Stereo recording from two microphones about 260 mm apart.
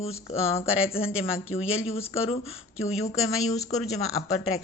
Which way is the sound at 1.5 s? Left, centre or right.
Left.